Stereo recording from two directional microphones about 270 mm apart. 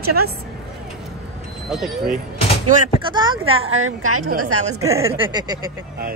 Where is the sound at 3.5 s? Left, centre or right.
Right.